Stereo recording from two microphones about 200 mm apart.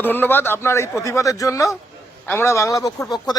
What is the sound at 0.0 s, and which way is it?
Speech, 10° left (ahead or behind).